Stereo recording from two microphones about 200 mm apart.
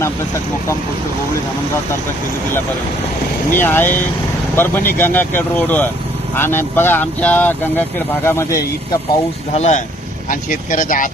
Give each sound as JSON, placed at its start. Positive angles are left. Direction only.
{"t": 3.5, "sound": "speech", "side_deg": 10}
{"t": 9.6, "sound": "speech", "side_deg": 35}